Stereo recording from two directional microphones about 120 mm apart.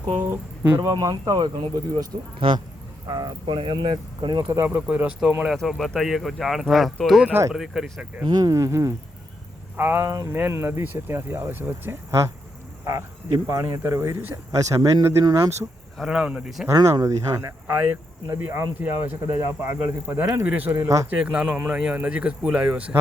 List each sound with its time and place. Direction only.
0.2 s speech: 15° right (ahead or behind)
0.8 s speech: 30° right (ahead or behind)
3.1 s speech: 35° right (ahead or behind)
4.4 s speech: 20° right (ahead or behind)
5.4 s speech: centre (ahead or behind)
7.3 s speech: 20° right (ahead or behind)
7.5 s speech: 5° right (ahead or behind)
8.3 s speech: 30° right (ahead or behind)
16.0 s speech: 5° right (ahead or behind)
16.6 s speech: 25° right (ahead or behind)
21.1 s speech: 10° right (ahead or behind)